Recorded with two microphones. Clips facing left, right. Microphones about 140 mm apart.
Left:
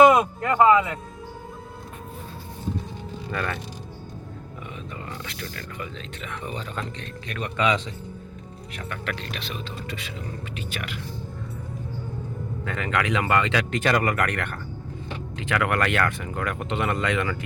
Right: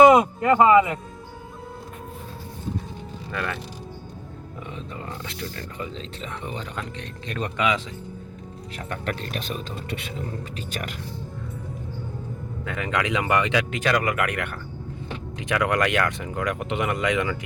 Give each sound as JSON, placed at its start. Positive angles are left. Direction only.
{"t": 0.1, "sound": "speech", "side_deg": -20}
{"t": 3.3, "sound": "speech", "side_deg": -5}
{"t": 5.2, "sound": "speech", "side_deg": -20}
{"t": 7.5, "sound": "speech", "side_deg": -10}
{"t": 8.9, "sound": "speech", "side_deg": -45}
{"t": 9.9, "sound": "speech", "side_deg": -55}
{"t": 10.5, "sound": "speech", "side_deg": -40}
{"t": 12.6, "sound": "speech", "side_deg": -15}